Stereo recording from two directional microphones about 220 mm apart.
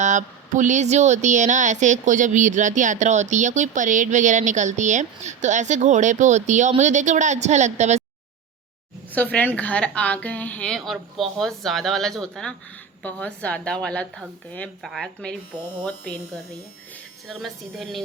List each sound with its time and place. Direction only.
0.0 s speech: 35° right (ahead or behind)
9.3 s speech: 5° left (ahead or behind)
17.2 s speech: centre (ahead or behind)